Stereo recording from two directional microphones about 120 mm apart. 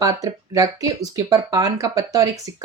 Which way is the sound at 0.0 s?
30° right (ahead or behind).